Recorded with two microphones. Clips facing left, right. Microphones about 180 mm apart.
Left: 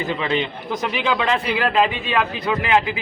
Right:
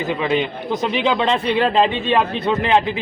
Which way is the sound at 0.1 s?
15° right (ahead or behind).